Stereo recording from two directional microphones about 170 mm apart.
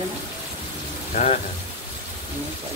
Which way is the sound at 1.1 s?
40° left (ahead or behind).